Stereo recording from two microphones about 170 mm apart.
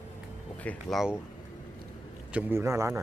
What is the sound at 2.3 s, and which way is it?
Speech, 15° right (ahead or behind).